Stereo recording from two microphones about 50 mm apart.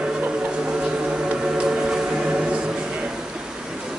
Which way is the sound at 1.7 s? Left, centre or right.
Centre.